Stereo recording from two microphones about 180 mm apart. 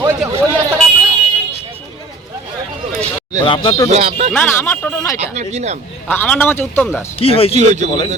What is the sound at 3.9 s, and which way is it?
Speech, 35° right (ahead or behind).